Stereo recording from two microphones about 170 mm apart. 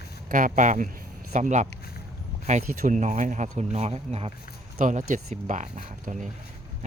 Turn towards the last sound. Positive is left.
turn(degrees=-45)  # may be behind; listen again after turning